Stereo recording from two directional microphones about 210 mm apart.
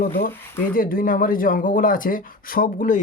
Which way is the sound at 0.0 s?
45° left (ahead or behind).